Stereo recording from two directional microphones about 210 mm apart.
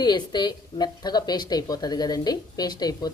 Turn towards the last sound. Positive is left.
turn(degrees=20)  # may be behind; listen again after turning